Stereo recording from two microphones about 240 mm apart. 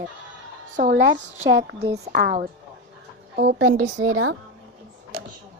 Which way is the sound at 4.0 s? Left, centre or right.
Right.